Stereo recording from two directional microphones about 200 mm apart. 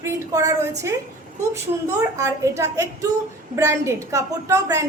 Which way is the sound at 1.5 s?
15° right (ahead or behind).